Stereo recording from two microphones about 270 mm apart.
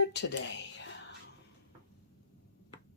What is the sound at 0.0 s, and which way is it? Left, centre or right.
Speech, left.